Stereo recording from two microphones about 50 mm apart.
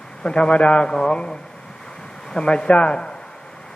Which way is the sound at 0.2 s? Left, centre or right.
Centre.